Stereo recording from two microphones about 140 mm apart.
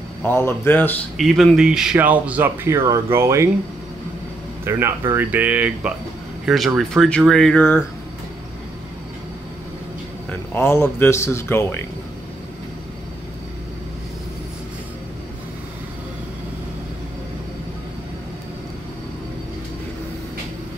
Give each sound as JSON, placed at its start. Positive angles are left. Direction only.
{"t": 0.2, "sound": "a man's voice", "side_deg": 15}
{"t": 1.1, "sound": "speech", "side_deg": 0}
{"t": 4.6, "sound": "speech", "side_deg": -15}
{"t": 10.5, "sound": "a man's voice", "side_deg": 15}